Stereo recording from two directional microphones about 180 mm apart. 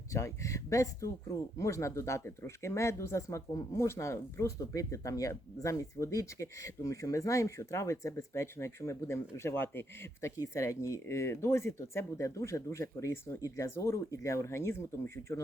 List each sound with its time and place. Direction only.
0.1 s speech: 15° left (ahead or behind)